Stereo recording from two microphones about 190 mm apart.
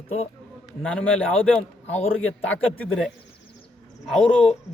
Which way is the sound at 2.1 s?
90° left.